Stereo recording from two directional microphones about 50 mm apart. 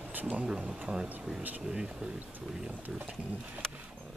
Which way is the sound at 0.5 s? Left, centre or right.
Right.